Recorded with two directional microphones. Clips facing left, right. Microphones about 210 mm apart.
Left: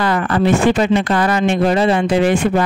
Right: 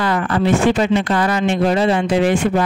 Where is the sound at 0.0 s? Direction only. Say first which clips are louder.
Left 2 dB; 55° left (ahead or behind).